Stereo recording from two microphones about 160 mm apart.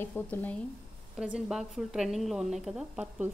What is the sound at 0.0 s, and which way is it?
Speech, 10° left (ahead or behind).